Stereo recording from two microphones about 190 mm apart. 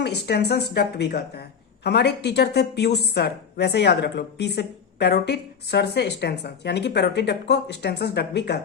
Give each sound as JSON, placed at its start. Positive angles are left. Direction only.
{"t": 0.0, "sound": "speech", "side_deg": 60}